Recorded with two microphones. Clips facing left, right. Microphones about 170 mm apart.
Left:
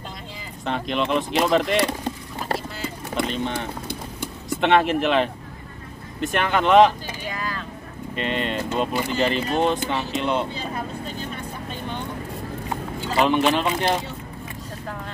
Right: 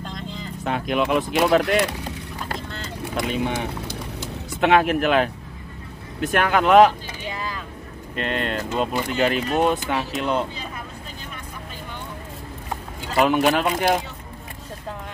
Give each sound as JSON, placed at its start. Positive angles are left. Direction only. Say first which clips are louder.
{"t": 0.7, "sound": "speech", "louder": "right 2 dB", "side_deg": -5}
{"t": 3.3, "sound": "speech", "louder": "right 2 dB", "side_deg": -10}
{"t": 4.6, "sound": "speech", "louder": "right 1 dB", "side_deg": 0}
{"t": 7.2, "sound": "vehicle", "louder": "even", "side_deg": -25}
{"t": 8.2, "sound": "speech", "louder": "even", "side_deg": 0}
{"t": 13.2, "sound": "speech", "louder": "right 1 dB", "side_deg": -5}